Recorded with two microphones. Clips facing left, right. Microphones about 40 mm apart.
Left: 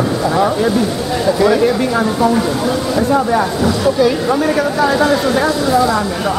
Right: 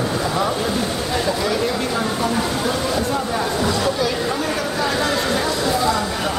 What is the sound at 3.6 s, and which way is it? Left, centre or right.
Speech, centre.